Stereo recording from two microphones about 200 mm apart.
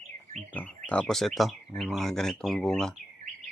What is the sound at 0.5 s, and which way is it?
Speech, 5° left (ahead or behind).